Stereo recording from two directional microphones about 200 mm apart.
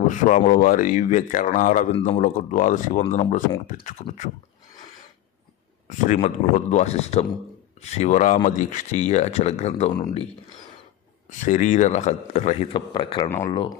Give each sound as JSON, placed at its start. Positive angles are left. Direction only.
{"t": 0.0, "sound": "speech", "side_deg": 40}
{"t": 5.9, "sound": "speech", "side_deg": 35}
{"t": 11.4, "sound": "speech", "side_deg": 40}
{"t": 12.7, "sound": "speech", "side_deg": 25}